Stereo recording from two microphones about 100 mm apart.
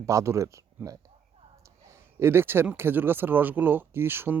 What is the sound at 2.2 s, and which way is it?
Speech, 25° right (ahead or behind).